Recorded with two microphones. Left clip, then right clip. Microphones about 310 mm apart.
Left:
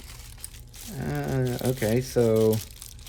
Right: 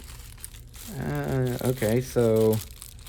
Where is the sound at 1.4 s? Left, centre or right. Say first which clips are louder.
Even; centre.